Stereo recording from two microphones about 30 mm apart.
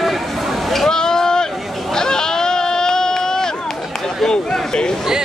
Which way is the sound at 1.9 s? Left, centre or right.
Left.